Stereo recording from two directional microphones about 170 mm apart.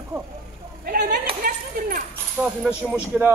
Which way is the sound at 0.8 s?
70° right (ahead or behind).